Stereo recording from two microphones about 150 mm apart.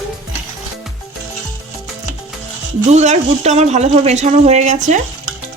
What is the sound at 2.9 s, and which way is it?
Speech, 50° right (ahead or behind).